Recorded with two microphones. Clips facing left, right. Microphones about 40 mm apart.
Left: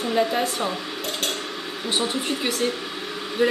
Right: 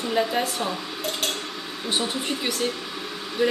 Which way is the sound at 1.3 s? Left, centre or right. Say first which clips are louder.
Left 2 dB; left.